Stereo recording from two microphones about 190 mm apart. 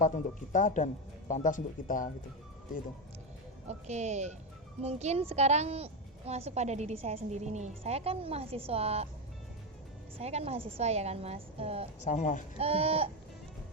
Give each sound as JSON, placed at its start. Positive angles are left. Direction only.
{"t": 0.5, "sound": "speech", "side_deg": 40}
{"t": 3.7, "sound": "a woman's voice", "side_deg": -35}
{"t": 10.2, "sound": "a woman's voice", "side_deg": -35}
{"t": 12.0, "sound": "speech", "side_deg": 40}
{"t": 12.5, "sound": "a woman's voice", "side_deg": -30}